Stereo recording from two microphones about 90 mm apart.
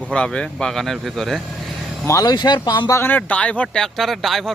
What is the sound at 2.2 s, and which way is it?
Speech, 55° left (ahead or behind).